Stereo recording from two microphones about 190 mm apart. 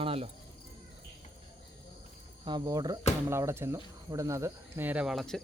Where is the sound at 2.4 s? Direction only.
20° right (ahead or behind); by 5.4 s centre (ahead or behind).